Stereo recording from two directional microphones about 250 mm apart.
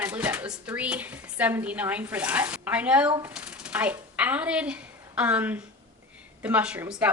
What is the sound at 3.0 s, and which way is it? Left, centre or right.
Speech, centre.